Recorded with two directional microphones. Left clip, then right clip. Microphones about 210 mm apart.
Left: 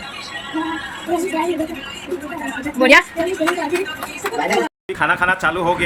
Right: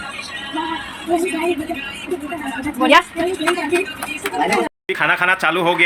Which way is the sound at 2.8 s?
20° left (ahead or behind).